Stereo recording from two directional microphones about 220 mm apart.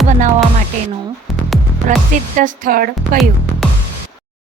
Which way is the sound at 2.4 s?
40° right (ahead or behind).